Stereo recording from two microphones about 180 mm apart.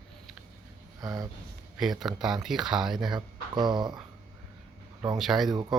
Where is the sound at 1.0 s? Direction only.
20° right (ahead or behind).